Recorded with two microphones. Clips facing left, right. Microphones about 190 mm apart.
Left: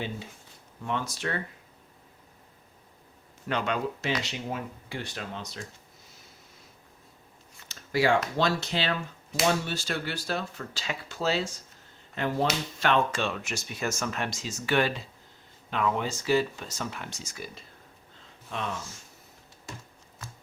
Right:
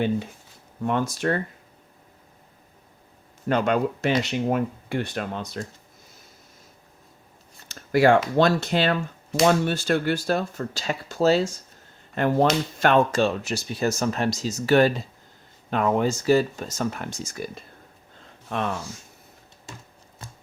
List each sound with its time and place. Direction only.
0.8 s speech: 50° right (ahead or behind)
3.5 s speech: 50° right (ahead or behind)
7.7 s a sound: 55° right (ahead or behind)
8.4 s speech: 55° right (ahead or behind)
12.1 s speech: 55° right (ahead or behind)